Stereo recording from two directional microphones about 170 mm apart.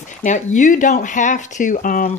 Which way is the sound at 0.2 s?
45° left (ahead or behind).